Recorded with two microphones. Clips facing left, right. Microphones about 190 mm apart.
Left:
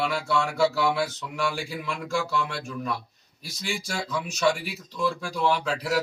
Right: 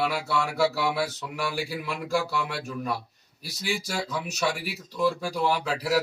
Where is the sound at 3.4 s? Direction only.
40° right (ahead or behind).